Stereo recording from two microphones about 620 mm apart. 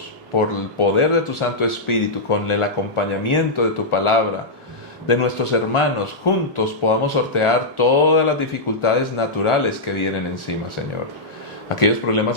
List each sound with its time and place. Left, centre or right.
0.3 s a man's voice: left
11.7 s a man's voice: left